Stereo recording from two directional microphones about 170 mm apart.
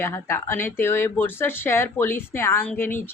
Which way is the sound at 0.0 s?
15° left (ahead or behind).